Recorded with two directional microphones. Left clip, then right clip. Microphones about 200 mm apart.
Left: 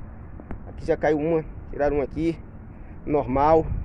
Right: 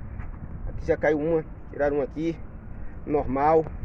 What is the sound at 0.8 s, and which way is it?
Speech, 20° left (ahead or behind).